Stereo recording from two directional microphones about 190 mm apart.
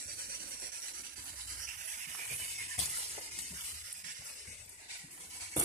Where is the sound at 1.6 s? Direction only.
45° right (ahead or behind).